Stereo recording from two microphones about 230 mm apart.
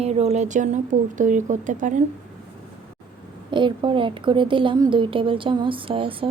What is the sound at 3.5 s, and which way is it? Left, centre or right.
Speech, right.